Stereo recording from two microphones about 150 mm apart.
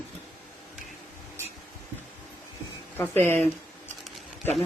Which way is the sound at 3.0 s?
15° left (ahead or behind).